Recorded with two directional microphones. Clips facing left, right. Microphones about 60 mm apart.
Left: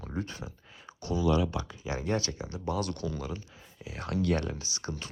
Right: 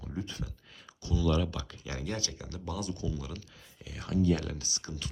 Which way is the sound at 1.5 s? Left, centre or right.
Left.